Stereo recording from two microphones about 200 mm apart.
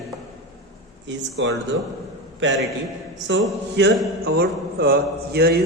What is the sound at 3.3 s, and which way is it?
Speech, 65° right (ahead or behind).